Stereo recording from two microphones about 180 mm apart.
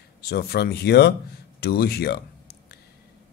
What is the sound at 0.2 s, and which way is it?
Speech, 60° left (ahead or behind).